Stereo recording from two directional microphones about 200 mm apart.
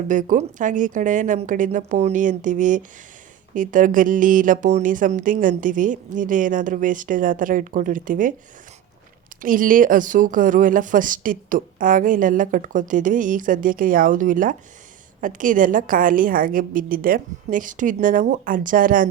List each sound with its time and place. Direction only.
0.1 s speech: 40° right (ahead or behind)
9.4 s a woman's voice: 45° right (ahead or behind)